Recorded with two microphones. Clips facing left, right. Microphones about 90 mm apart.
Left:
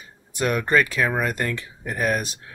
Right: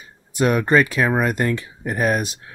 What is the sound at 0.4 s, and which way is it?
Speech, 20° right (ahead or behind).